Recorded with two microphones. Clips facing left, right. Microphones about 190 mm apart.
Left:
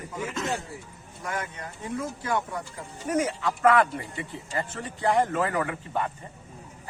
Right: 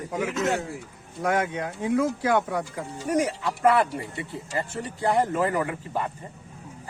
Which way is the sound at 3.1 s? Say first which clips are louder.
Right 1 dB; 35° right (ahead or behind).